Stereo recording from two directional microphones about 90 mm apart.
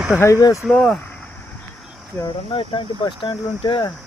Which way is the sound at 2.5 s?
70° left (ahead or behind).